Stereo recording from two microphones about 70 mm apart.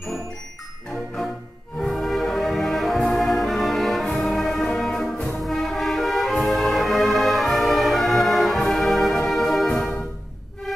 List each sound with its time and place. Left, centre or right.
1.8 s music: centre